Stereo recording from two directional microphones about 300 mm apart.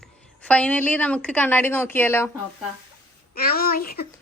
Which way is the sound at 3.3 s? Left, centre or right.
Left.